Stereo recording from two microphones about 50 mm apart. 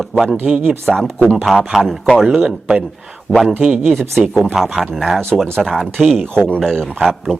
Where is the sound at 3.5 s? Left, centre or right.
Right.